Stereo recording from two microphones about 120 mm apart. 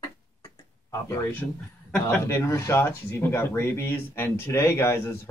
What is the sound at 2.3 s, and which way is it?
Speech, 20° left (ahead or behind).